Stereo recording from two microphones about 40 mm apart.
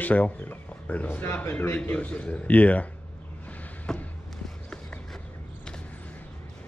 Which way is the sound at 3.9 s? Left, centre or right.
Centre.